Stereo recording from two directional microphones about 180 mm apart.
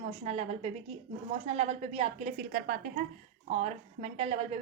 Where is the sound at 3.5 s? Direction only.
40° right (ahead or behind).